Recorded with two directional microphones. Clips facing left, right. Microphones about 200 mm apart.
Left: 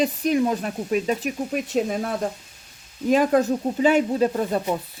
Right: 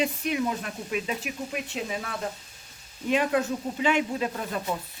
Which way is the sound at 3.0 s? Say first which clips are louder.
Left 6 dB; 40° left (ahead or behind).